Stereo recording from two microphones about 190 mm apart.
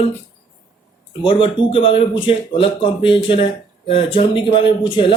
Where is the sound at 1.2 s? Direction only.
25° left (ahead or behind).